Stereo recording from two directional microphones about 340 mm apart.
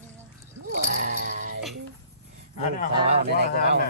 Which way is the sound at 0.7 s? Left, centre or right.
Right.